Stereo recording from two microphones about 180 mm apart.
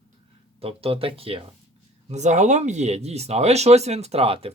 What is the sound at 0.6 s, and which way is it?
Speech, 30° right (ahead or behind).